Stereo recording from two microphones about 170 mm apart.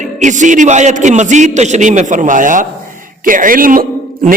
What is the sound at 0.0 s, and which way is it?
A man's voice, 45° right (ahead or behind).